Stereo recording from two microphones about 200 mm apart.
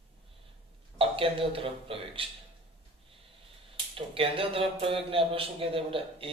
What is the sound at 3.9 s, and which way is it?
Speech, 25° right (ahead or behind).